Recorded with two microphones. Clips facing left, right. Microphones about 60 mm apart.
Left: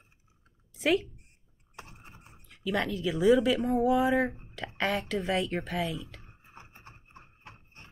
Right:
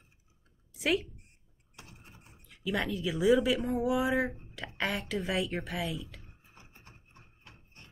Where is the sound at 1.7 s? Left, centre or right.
Left.